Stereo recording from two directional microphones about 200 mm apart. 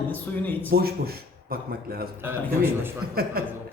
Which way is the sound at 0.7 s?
50° right (ahead or behind).